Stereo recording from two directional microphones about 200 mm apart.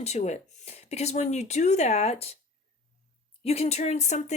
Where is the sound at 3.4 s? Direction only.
30° left (ahead or behind).